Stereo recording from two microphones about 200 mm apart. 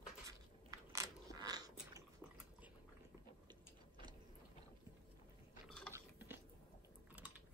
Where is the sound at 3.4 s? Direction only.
20° right (ahead or behind).